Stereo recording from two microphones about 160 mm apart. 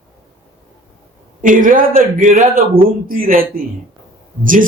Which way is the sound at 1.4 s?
55° right (ahead or behind).